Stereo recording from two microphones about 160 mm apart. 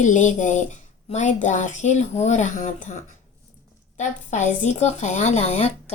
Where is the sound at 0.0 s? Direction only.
50° left (ahead or behind).